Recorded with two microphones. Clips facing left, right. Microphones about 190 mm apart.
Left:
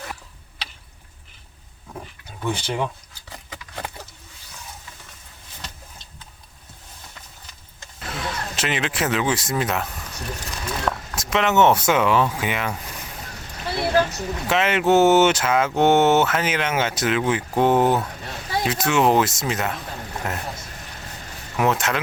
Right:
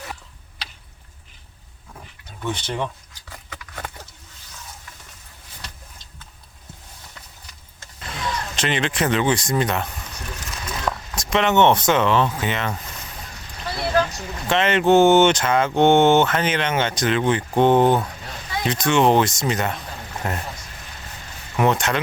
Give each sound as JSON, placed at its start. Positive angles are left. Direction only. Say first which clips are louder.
{"t": 2.4, "sound": "speech", "louder": "left 1 dB", "side_deg": 10}
{"t": 3.2, "sound": "horse", "louder": "left 1 dB", "side_deg": 20}
{"t": 8.0, "sound": "speech", "louder": "right 1 dB", "side_deg": 5}
{"t": 21.5, "sound": "speech", "louder": "right 2 dB", "side_deg": 0}